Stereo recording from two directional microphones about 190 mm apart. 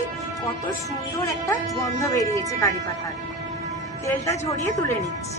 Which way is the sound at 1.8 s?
15° left (ahead or behind).